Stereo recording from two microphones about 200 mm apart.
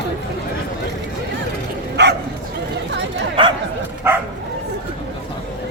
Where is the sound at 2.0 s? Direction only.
60° right (ahead or behind).